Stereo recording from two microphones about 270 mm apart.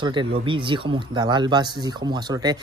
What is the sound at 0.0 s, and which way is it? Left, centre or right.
Speech, centre.